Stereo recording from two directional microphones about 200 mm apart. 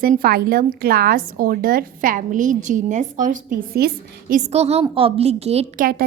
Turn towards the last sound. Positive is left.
turn(degrees=-40)  # may be behind; listen again after turning